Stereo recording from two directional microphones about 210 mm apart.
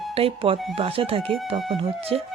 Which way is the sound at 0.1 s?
25° right (ahead or behind).